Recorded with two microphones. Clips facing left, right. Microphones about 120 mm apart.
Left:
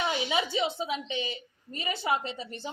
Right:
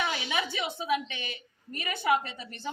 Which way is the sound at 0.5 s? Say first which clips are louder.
Even; 20° left (ahead or behind).